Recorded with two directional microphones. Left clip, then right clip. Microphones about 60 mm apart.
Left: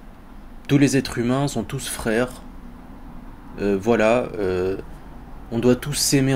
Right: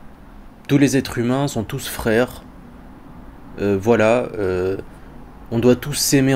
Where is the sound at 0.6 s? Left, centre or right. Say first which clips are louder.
Right 2 dB; centre.